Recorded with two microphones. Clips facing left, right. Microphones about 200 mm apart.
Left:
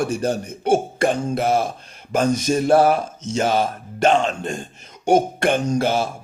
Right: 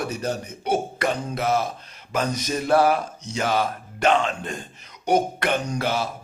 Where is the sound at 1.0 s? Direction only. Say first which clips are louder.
Left 5 dB; 25° left (ahead or behind).